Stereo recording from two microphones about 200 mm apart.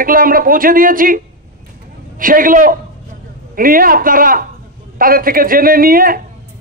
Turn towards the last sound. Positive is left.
turn(degrees=-45)  # may be behind; listen again after turning